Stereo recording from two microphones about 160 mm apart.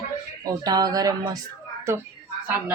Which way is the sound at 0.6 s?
25° right (ahead or behind).